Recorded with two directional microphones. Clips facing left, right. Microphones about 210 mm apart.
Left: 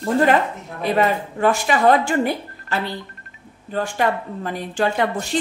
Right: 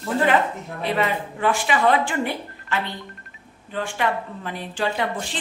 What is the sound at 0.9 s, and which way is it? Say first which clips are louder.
Speech: left 6 dB; 45° left (ahead or behind).